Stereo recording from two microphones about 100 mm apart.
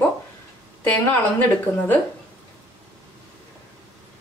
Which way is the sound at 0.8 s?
15° left (ahead or behind).